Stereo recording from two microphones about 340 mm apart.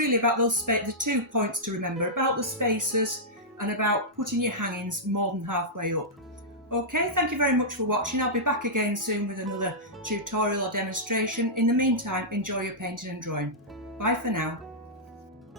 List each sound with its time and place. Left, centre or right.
0.0 s speech: right